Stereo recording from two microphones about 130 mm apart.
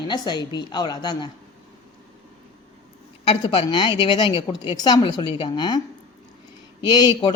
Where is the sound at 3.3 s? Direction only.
45° left (ahead or behind).